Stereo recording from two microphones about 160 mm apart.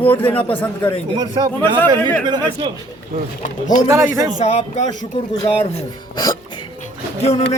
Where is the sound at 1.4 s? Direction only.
25° right (ahead or behind).